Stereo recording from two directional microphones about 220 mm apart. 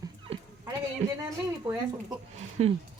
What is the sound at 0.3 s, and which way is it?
Dog, 25° right (ahead or behind).